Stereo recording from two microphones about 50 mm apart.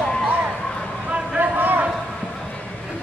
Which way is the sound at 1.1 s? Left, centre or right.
Right.